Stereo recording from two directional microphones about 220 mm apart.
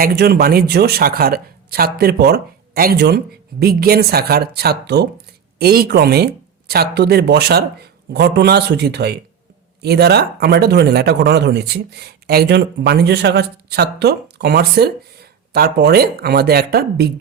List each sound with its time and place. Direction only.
0.0 s speech: 45° right (ahead or behind)